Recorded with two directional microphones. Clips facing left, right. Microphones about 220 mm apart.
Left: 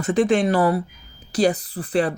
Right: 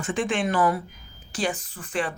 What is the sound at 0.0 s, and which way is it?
Speech, 40° left (ahead or behind).